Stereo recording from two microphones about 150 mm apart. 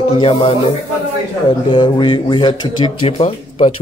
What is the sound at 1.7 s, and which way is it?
Speech, 30° left (ahead or behind).